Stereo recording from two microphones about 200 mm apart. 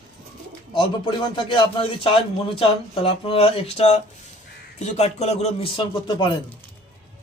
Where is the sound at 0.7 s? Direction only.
25° left (ahead or behind).